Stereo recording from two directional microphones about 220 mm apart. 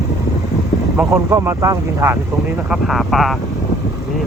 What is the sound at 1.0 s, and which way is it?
Speech, 15° right (ahead or behind).